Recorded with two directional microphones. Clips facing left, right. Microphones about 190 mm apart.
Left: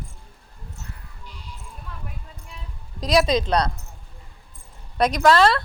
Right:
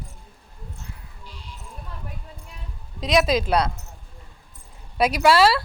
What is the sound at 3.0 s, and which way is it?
Speech, centre (ahead or behind).